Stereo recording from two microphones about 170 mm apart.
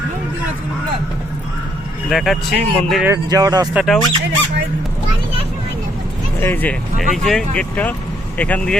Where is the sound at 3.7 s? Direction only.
5° right (ahead or behind).